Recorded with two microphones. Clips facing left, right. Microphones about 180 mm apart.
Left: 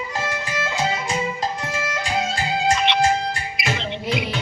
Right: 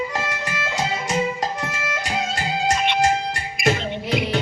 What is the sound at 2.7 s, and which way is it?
Music, 50° right (ahead or behind).